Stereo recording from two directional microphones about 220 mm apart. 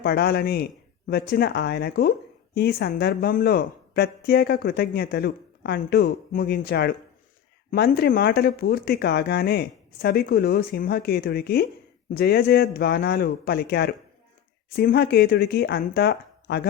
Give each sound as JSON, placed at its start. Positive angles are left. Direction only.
{"t": 0.0, "sound": "speech", "side_deg": 45}